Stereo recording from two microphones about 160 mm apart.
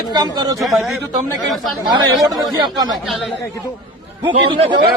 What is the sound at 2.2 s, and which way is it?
Speech, 25° right (ahead or behind).